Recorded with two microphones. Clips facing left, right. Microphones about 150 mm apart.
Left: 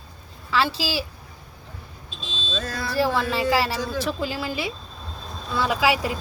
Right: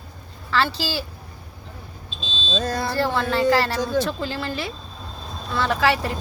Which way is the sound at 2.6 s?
40° right (ahead or behind).